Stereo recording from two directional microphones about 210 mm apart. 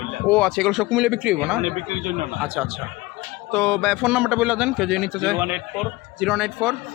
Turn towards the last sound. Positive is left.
turn(degrees=0)  # may be behind; listen again after turning